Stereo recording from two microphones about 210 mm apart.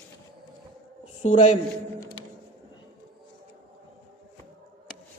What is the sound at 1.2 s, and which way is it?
Speech, 35° left (ahead or behind).